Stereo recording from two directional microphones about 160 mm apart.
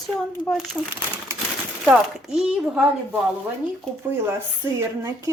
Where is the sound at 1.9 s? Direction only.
5° right (ahead or behind).